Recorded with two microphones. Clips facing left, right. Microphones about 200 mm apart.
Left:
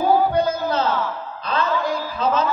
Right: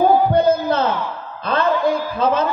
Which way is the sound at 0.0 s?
55° right (ahead or behind).